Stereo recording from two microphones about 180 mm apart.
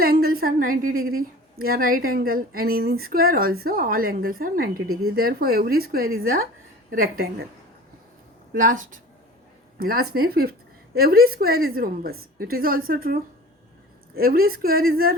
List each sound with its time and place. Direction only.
0.0 s a woman's voice: 55° right (ahead or behind)
8.5 s a woman's voice: 50° right (ahead or behind)
14.2 s a woman's voice: 55° right (ahead or behind)